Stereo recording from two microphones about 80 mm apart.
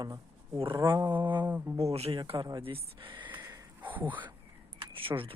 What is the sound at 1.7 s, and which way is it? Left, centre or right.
Speech, right.